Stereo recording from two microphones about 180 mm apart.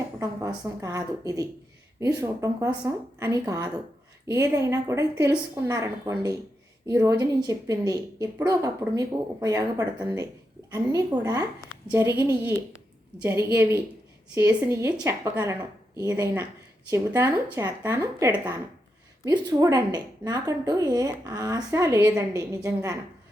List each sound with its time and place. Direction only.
0.2 s speech: 20° right (ahead or behind)